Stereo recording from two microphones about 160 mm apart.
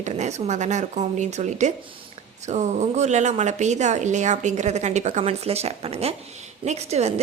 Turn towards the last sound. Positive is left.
turn(degrees=-40)  # may be behind; listen again after turning